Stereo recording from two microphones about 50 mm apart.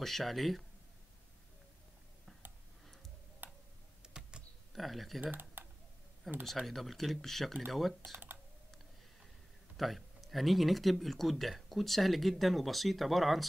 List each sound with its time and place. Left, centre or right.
0.0 s speech: centre
3.4 s tick-tock: right
4.0 s computer keyboard: centre
4.7 s speech: centre
5.2 s speech: right
6.4 s speech: centre
9.8 s speech: centre